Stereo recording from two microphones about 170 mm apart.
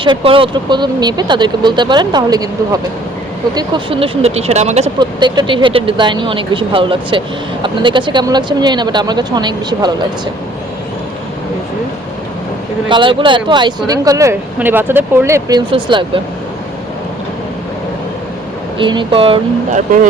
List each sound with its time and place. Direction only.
0.0 s speech: 30° right (ahead or behind)
4.9 s speech: 25° right (ahead or behind)
12.9 s speech: 30° right (ahead or behind)
18.8 s speech: 30° right (ahead or behind)